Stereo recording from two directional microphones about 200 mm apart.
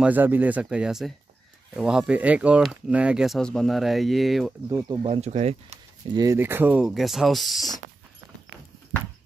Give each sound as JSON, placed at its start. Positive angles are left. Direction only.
{"t": 0.0, "sound": "speech", "side_deg": -10}
{"t": 4.6, "sound": "speech", "side_deg": -20}
{"t": 6.1, "sound": "speech", "side_deg": -15}